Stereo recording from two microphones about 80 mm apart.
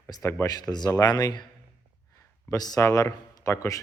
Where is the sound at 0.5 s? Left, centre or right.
Left.